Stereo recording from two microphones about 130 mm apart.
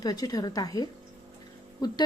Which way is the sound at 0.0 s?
30° left (ahead or behind).